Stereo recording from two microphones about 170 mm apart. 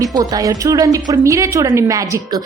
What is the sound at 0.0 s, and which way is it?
A woman's voice, 20° right (ahead or behind).